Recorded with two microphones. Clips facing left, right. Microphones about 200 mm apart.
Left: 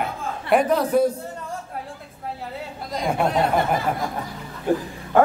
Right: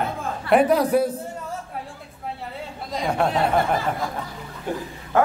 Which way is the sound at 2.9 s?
Centre (ahead or behind).